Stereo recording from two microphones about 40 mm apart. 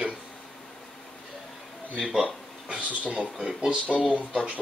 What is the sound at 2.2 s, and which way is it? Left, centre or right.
Speech, right.